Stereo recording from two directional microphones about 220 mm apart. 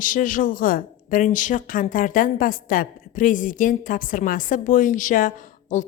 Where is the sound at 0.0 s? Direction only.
40° left (ahead or behind).